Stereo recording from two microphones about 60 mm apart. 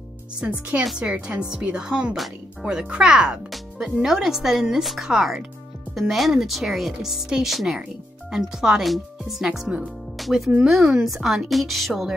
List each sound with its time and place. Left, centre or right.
0.5 s speech: right; by 9.7 s centre
10.1 s music: centre
10.7 s speech: centre